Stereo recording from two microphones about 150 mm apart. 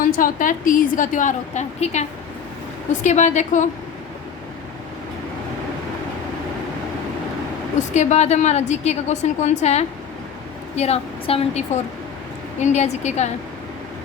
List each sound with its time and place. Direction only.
0.0 s a woman's voice: 65° left (ahead or behind)
7.8 s a woman's voice: 50° left (ahead or behind)